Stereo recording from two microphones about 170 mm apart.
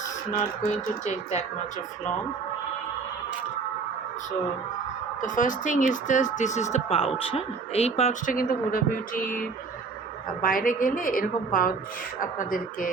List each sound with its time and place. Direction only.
0.3 s speech: 45° left (ahead or behind)
5.2 s speech: 50° left (ahead or behind)
10.4 s a woman's voice: 55° left (ahead or behind)